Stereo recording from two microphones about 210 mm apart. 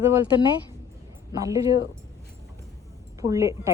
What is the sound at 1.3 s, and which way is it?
Speech, 15° right (ahead or behind).